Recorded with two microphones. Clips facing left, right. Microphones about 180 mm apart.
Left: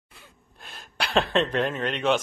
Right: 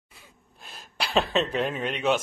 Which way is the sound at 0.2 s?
Centre (ahead or behind).